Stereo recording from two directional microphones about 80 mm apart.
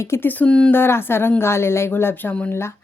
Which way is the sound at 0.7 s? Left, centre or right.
Left.